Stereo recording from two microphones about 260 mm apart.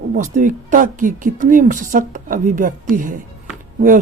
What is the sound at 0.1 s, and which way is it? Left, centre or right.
Speech, right.